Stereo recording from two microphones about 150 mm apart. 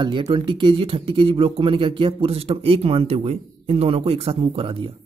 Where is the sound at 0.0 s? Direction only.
35° right (ahead or behind).